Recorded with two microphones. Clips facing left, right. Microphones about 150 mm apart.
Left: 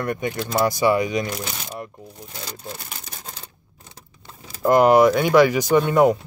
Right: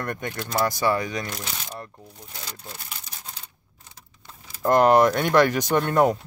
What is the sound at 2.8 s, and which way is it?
Crumpling, 50° left (ahead or behind).